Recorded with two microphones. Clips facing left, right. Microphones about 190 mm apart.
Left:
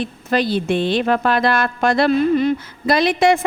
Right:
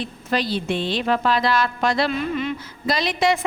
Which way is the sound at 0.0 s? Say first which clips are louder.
Left 5 dB; 50° left (ahead or behind).